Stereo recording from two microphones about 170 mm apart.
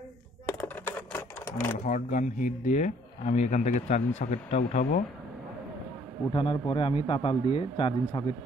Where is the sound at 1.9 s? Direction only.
45° left (ahead or behind).